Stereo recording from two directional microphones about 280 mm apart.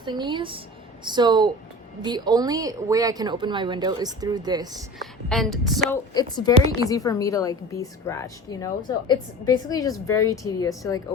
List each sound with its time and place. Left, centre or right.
0.0 s a woman's voice: centre
4.9 s a woman's voice: centre
6.1 s a woman's voice: centre